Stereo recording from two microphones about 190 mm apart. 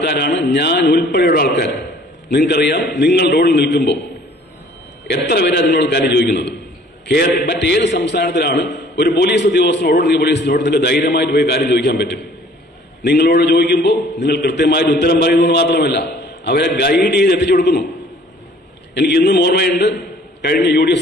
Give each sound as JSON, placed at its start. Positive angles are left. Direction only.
{"t": 0.0, "sound": "a man's voice", "side_deg": 60}
{"t": 5.1, "sound": "a man's voice", "side_deg": 60}
{"t": 18.9, "sound": "a man's voice", "side_deg": 60}